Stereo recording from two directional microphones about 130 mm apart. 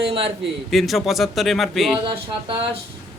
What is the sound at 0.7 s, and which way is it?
A man's voice, centre (ahead or behind).